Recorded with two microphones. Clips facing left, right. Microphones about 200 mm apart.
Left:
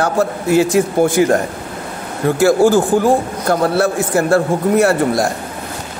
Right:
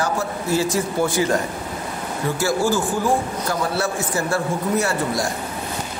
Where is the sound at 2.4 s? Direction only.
55° left (ahead or behind).